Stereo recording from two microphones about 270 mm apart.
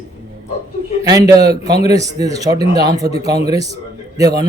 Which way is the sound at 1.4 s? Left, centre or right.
Right.